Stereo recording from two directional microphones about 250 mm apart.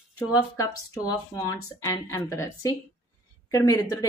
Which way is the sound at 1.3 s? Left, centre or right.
Centre.